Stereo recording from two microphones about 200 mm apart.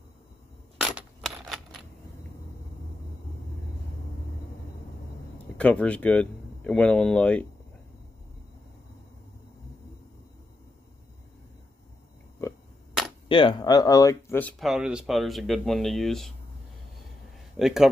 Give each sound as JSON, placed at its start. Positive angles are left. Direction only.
{"t": 0.7, "sound": "coin", "side_deg": -5}
{"t": 5.6, "sound": "speech", "side_deg": 5}
{"t": 12.4, "sound": "a sound", "side_deg": 15}
{"t": 13.3, "sound": "speech", "side_deg": 25}
{"t": 14.6, "sound": "speech", "side_deg": 0}
{"t": 17.6, "sound": "speech", "side_deg": 0}